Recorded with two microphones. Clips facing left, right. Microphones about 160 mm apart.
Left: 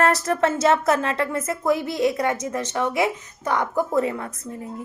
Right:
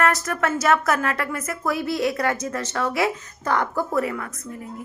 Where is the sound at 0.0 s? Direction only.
30° left (ahead or behind).